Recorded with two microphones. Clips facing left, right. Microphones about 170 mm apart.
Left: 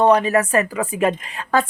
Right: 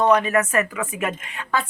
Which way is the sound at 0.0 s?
30° left (ahead or behind).